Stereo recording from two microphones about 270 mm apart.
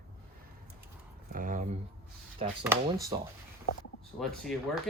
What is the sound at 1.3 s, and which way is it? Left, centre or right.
Speech, right.